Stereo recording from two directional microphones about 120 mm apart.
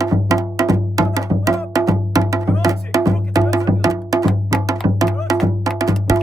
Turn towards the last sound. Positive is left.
turn(degrees=-30)  # may be behind; listen again after turning